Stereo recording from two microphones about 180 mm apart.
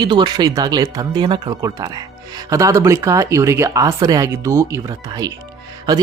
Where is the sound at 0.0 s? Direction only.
25° right (ahead or behind).